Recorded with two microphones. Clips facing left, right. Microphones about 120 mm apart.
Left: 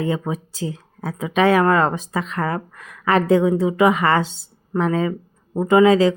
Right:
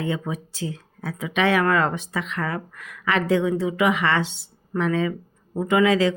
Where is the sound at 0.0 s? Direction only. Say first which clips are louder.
Left 4 dB; 35° left (ahead or behind).